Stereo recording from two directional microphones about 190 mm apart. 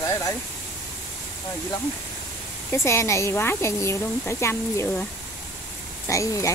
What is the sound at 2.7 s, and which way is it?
Speech, 15° left (ahead or behind).